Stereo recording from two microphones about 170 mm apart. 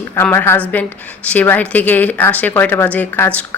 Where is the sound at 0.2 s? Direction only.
15° left (ahead or behind).